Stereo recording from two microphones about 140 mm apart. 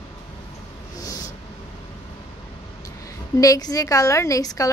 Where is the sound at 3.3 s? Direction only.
25° left (ahead or behind).